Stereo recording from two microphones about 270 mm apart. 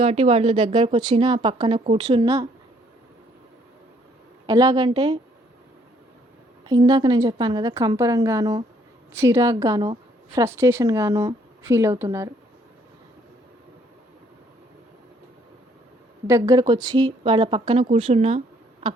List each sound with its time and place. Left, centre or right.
0.0 s a woman's voice: right
4.4 s a woman's voice: centre
6.7 s a woman's voice: centre
16.2 s a woman's voice: centre